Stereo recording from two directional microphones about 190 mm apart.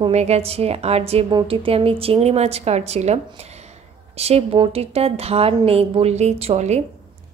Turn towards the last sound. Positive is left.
turn(degrees=-35)  # may be behind; listen again after turning